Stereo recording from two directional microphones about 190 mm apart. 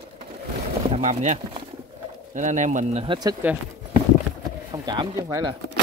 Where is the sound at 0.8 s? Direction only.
35° right (ahead or behind).